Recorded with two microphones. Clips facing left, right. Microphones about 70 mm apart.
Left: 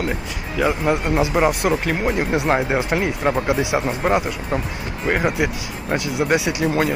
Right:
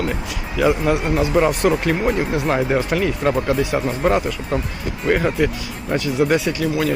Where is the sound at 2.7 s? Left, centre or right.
Centre.